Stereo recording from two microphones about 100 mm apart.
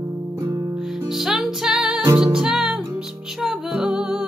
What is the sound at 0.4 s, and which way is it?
Music, 35° right (ahead or behind).